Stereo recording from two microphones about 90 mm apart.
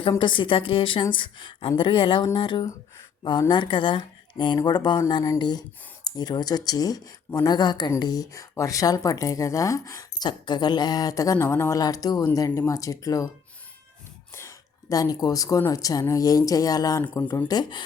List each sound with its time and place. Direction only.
0.2 s a woman's voice: 65° left (ahead or behind)
1.1 s speech: 65° left (ahead or behind); by 10.2 s 40° left (ahead or behind)
10.2 s speech: 55° left (ahead or behind); by 11.8 s 30° left (ahead or behind)
11.8 s speech: 45° left (ahead or behind)
14.3 s a sound: 30° left (ahead or behind)
14.9 s speech: 45° left (ahead or behind)
17.5 s speech: 55° left (ahead or behind)